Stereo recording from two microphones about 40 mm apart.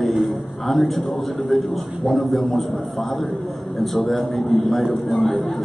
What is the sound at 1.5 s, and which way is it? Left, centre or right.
A man's voice, centre.